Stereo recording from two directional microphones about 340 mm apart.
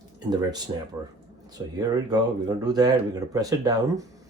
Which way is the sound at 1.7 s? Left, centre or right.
Centre.